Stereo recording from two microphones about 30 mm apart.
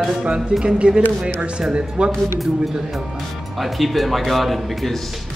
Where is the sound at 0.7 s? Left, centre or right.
Right.